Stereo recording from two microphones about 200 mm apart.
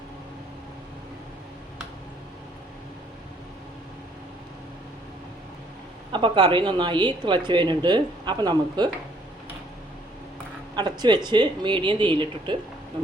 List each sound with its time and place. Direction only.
6.1 s speech: 25° right (ahead or behind)
10.8 s speech: 20° right (ahead or behind)